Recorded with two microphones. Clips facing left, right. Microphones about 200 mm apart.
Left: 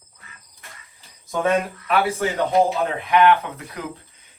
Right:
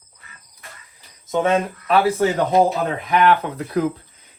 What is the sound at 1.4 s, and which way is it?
Speech, 30° right (ahead or behind).